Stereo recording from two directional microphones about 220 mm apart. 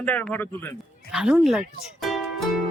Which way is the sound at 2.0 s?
Centre (ahead or behind).